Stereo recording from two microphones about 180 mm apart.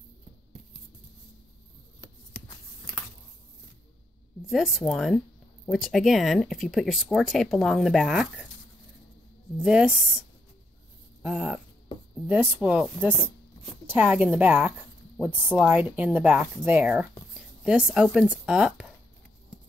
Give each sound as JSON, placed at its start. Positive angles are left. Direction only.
{"t": 4.5, "sound": "speech", "side_deg": 0}
{"t": 9.6, "sound": "speech", "side_deg": -5}
{"t": 11.2, "sound": "speech", "side_deg": -5}